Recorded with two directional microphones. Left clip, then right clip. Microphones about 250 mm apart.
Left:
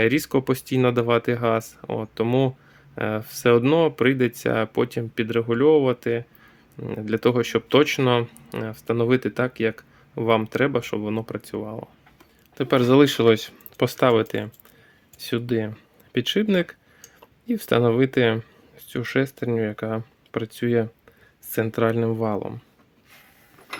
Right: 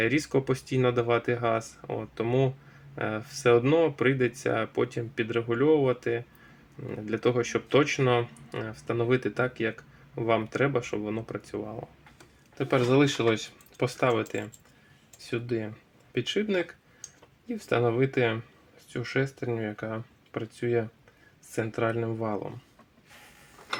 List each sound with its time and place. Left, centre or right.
0.0 s speech: left